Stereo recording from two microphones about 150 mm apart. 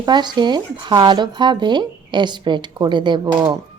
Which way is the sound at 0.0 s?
30° right (ahead or behind).